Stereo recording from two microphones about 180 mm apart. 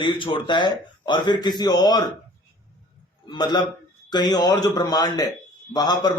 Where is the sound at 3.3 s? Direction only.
25° left (ahead or behind).